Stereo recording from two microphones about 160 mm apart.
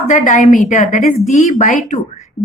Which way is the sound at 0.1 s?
50° left (ahead or behind).